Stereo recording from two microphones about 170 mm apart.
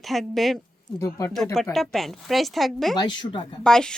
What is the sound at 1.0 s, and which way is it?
Speech, 15° left (ahead or behind).